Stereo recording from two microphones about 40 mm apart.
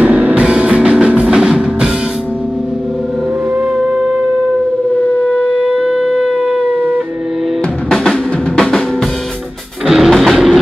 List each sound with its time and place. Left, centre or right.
0.0 s music: right
1.2 s music: centre
3.7 s shofar: centre
6.0 s shofar: centre
7.9 s drum: centre
9.8 s music: centre